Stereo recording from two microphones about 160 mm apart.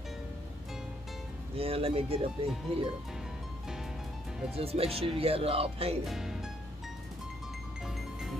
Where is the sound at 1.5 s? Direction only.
35° right (ahead or behind).